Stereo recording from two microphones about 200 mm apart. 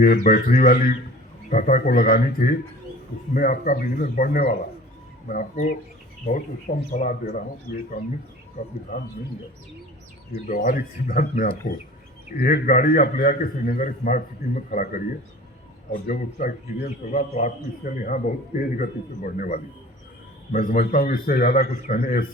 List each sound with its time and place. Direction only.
0.0 s a man's voice: 45° left (ahead or behind)
8.6 s a man's voice: 45° left (ahead or behind)
10.3 s a man's voice: 40° left (ahead or behind)